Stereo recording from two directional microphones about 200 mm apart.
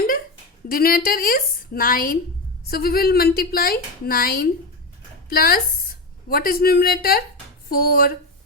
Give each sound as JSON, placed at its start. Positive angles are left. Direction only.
{"t": 0.7, "sound": "a woman's voice", "side_deg": 45}